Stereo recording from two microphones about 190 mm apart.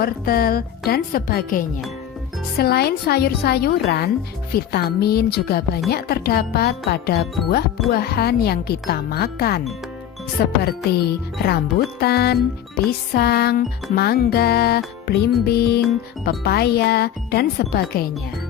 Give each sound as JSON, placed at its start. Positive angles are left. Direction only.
{"t": 0.0, "sound": "a woman's voice", "side_deg": 50}